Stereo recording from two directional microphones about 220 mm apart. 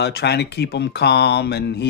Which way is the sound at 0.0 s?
50° left (ahead or behind).